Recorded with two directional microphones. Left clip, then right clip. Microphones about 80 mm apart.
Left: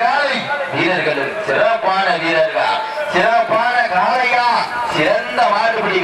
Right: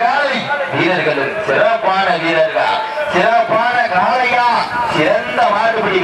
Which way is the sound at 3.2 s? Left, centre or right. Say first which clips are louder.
Right 1 dB; centre.